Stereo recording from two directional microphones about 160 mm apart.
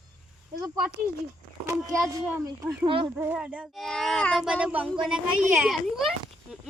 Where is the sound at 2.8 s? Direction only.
35° right (ahead or behind).